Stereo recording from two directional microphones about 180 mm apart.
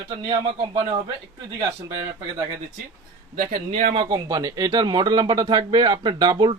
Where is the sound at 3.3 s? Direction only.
45° right (ahead or behind).